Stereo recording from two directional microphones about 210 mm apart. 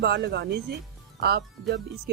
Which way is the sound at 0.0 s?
50° right (ahead or behind).